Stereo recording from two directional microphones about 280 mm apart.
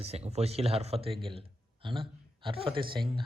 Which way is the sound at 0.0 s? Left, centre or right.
Right.